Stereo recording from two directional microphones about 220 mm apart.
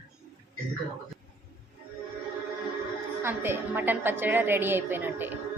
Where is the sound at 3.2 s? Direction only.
10° right (ahead or behind).